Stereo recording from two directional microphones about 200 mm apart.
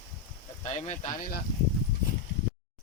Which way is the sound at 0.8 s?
40° left (ahead or behind).